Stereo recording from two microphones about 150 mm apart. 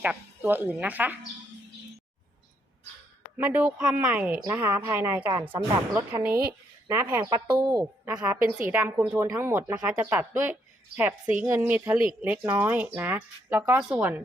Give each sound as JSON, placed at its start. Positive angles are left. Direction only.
{"t": 0.0, "sound": "a woman's voice", "side_deg": -10}
{"t": 3.3, "sound": "a woman's voice", "side_deg": -10}
{"t": 7.3, "sound": "a woman's voice", "side_deg": -25}